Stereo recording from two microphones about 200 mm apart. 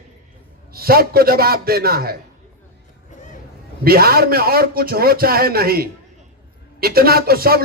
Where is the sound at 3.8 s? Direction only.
50° right (ahead or behind).